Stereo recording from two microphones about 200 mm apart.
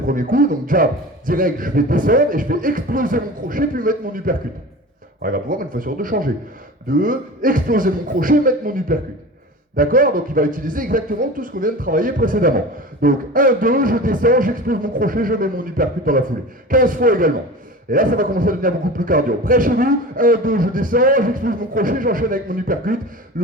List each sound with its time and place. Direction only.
0.1 s a man's voice: 45° right (ahead or behind)